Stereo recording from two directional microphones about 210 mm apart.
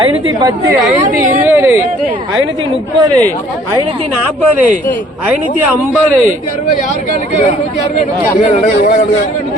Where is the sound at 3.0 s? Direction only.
20° right (ahead or behind).